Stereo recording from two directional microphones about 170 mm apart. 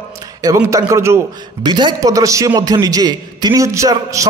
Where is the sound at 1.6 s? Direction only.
25° right (ahead or behind).